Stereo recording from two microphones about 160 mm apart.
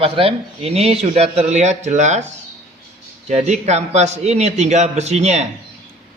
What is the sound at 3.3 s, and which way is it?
A man's voice, 45° right (ahead or behind).